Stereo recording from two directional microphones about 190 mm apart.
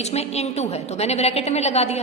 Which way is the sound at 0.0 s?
35° left (ahead or behind).